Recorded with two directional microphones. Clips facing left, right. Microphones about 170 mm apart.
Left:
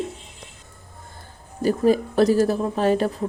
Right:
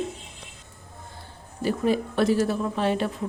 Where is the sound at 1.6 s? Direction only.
40° left (ahead or behind).